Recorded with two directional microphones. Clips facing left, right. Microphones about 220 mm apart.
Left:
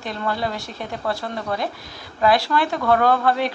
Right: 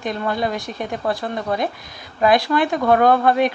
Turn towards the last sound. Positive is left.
turn(degrees=-20)  # may be behind; listen again after turning